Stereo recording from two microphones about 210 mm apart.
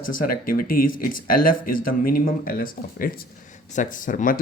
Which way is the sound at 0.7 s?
45° left (ahead or behind).